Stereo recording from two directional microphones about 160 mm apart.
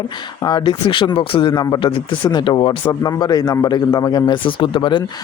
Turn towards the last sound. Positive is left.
turn(degrees=30)  # may be behind; listen again after turning